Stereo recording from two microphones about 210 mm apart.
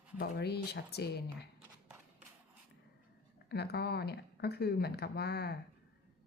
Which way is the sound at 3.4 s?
50° left (ahead or behind).